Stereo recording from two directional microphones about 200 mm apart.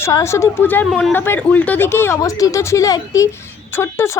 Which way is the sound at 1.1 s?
10° left (ahead or behind).